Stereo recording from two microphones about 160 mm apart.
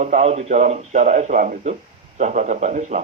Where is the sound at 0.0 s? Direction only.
45° right (ahead or behind).